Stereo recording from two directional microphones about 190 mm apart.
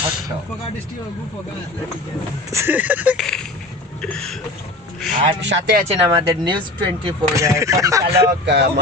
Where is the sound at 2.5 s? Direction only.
15° right (ahead or behind).